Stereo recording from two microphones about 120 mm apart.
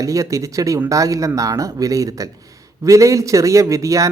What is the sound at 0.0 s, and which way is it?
A man's voice, 25° right (ahead or behind).